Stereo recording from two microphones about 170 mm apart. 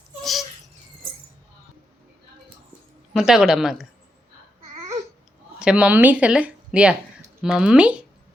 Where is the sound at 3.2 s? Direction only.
5° right (ahead or behind).